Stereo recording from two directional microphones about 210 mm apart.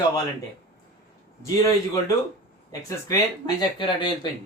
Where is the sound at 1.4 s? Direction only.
15° left (ahead or behind).